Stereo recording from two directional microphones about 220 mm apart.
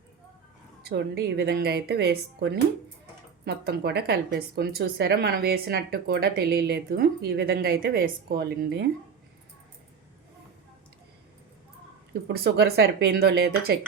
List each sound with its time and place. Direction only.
0.8 s a woman's voice: 45° right (ahead or behind)
12.3 s a woman's voice: 45° right (ahead or behind)